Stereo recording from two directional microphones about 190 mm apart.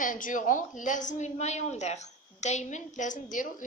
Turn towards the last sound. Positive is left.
turn(degrees=45)  # may be behind; listen again after turning